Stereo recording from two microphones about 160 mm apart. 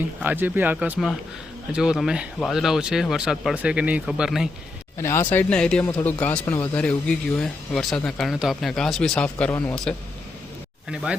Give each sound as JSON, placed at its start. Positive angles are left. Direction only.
{"t": 0.2, "sound": "speech", "side_deg": -10}
{"t": 4.9, "sound": "speech", "side_deg": 15}
{"t": 10.9, "sound": "speech", "side_deg": -5}